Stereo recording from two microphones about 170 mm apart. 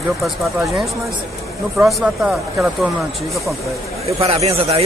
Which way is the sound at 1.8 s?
Centre (ahead or behind).